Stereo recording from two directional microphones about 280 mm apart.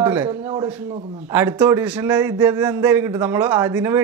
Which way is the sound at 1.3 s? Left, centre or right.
Centre.